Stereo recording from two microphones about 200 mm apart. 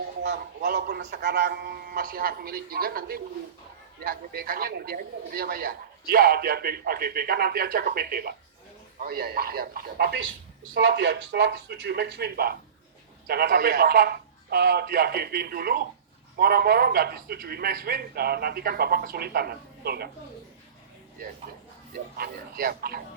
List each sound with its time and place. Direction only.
0.2 s speech: 55° right (ahead or behind)
10.2 s speech: 80° right; by 20.1 s 50° right (ahead or behind)
22.2 s speech: 50° right (ahead or behind)